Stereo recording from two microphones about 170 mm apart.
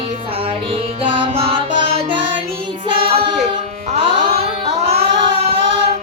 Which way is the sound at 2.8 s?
35° right (ahead or behind).